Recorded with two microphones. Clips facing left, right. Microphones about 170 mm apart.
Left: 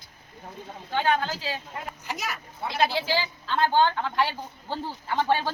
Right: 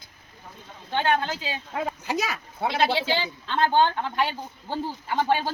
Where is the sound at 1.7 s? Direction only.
90° right.